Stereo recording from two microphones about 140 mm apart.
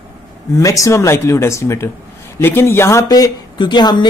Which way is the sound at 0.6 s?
25° left (ahead or behind).